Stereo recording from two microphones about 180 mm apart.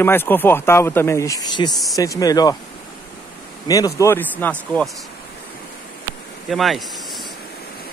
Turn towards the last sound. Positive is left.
turn(degrees=0)  # may be behind; listen again after turning